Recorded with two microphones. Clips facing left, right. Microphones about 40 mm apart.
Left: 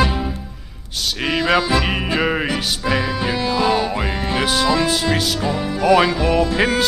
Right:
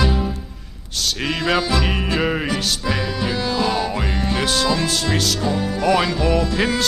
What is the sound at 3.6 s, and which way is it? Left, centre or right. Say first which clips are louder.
Music: left 4 dB; centre.